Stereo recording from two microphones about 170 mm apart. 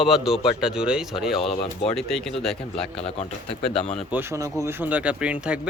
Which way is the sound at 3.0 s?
35° left (ahead or behind).